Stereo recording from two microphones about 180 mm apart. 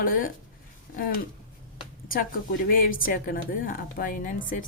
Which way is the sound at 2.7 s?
50° left (ahead or behind).